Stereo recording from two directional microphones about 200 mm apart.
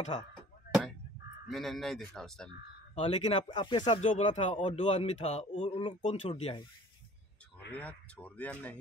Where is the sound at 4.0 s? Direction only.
35° left (ahead or behind).